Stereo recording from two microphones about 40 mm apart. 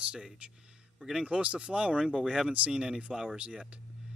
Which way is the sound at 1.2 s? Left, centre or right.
Right.